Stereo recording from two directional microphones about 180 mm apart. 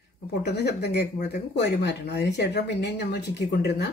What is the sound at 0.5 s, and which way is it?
Speech, 65° left (ahead or behind).